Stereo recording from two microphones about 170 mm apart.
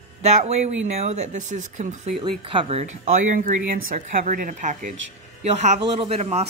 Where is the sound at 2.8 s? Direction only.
45° right (ahead or behind).